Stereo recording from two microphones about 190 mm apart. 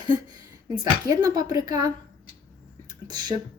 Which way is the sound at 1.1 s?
20° right (ahead or behind).